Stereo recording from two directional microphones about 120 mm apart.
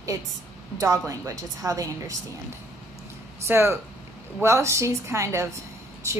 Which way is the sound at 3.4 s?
20° right (ahead or behind).